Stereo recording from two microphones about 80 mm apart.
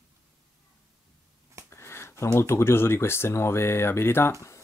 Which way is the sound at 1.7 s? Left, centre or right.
Left.